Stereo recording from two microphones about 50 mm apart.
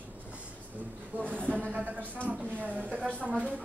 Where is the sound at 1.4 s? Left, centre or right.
Right.